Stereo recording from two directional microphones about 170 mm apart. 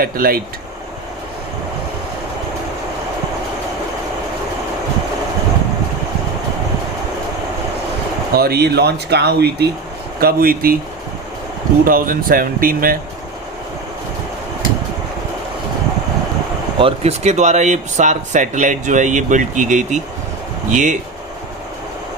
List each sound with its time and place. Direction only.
0.0 s speech: 60° right (ahead or behind)
8.4 s speech: 70° right (ahead or behind)
10.2 s speech: 60° right (ahead or behind)
11.9 s speech: 55° right (ahead or behind)
16.7 s speech: 35° right (ahead or behind)